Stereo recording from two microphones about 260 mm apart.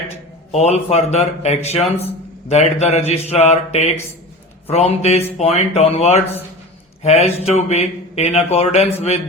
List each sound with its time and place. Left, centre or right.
0.5 s speech: left